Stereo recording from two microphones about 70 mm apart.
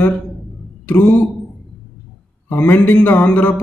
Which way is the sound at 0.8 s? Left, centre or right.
Left.